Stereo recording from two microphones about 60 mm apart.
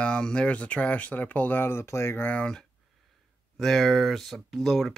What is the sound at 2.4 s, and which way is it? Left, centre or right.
Speech, centre.